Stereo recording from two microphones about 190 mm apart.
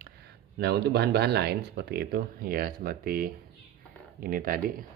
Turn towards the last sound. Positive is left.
turn(degrees=-50)  # may be behind; listen again after turning